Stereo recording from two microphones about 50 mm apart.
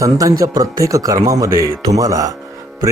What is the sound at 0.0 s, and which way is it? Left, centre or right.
Speech, right.